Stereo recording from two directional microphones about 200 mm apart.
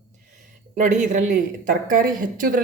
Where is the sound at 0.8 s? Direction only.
40° right (ahead or behind).